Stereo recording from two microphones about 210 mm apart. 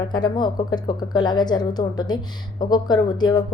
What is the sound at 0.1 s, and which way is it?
A woman's voice, 20° left (ahead or behind).